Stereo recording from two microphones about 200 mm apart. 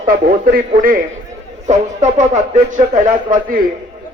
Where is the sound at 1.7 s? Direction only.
35° right (ahead or behind).